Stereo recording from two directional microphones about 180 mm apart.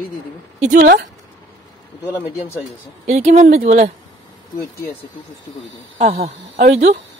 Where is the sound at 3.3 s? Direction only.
40° right (ahead or behind).